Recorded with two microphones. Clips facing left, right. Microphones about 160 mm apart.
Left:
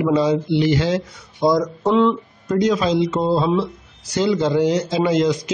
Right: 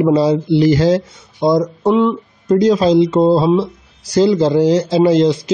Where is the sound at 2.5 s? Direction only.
35° right (ahead or behind).